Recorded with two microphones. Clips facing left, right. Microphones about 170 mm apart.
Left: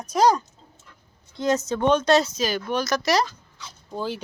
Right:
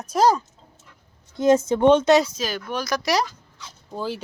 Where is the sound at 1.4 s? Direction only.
25° right (ahead or behind).